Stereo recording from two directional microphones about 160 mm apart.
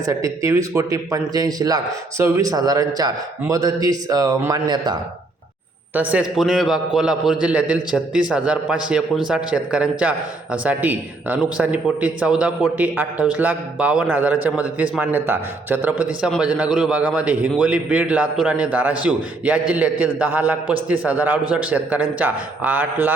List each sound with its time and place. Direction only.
0.0 s a man's voice: 20° right (ahead or behind)
5.9 s a man's voice: 10° right (ahead or behind)